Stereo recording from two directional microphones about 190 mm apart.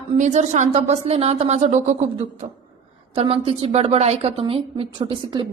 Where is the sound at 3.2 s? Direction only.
30° right (ahead or behind).